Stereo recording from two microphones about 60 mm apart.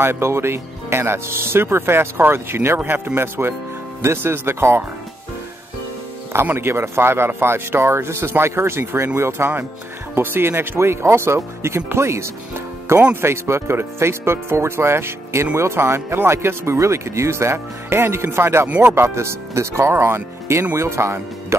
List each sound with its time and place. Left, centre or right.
0.0 s speech: right
6.4 s speech: right
19.0 s speech: right